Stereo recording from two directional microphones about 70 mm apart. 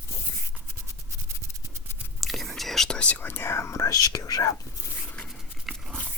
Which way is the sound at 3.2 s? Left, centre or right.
Left.